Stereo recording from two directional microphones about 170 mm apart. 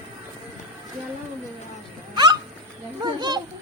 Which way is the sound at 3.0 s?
25° right (ahead or behind).